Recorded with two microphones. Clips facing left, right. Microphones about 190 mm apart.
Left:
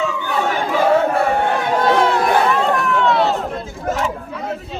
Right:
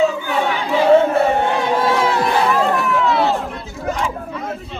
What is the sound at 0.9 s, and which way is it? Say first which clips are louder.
Battle cry: right 3 dB; 25° right (ahead or behind).